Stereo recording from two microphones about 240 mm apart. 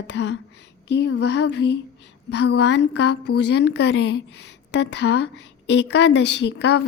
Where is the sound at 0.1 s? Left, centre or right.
Left.